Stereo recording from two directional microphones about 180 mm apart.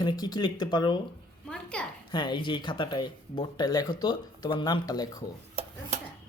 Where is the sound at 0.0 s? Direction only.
25° left (ahead or behind).